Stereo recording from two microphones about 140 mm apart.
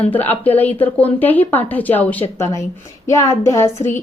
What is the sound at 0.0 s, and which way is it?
A woman's voice, 10° left (ahead or behind).